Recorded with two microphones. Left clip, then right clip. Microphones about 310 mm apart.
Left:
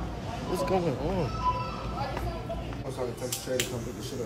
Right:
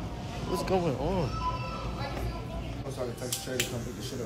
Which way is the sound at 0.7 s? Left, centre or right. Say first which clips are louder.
Even; centre.